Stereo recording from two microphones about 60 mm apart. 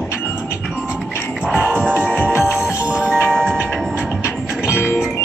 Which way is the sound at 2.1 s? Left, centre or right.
Centre.